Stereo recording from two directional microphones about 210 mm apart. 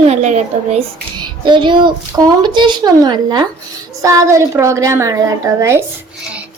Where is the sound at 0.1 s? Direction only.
35° right (ahead or behind).